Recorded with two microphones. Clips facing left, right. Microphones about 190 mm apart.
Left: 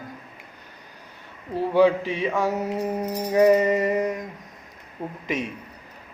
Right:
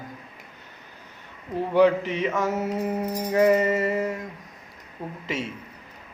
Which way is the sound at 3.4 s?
15° left (ahead or behind).